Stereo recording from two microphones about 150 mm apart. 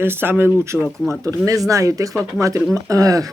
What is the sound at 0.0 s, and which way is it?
Speech, 15° right (ahead or behind).